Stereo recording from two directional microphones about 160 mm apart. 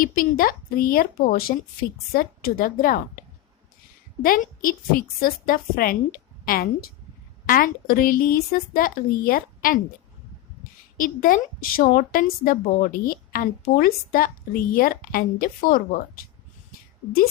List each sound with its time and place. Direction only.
0.0 s a woman's voice: 65° left (ahead or behind)
4.2 s a woman's voice: 60° left (ahead or behind)
10.9 s a woman's voice: 60° left (ahead or behind)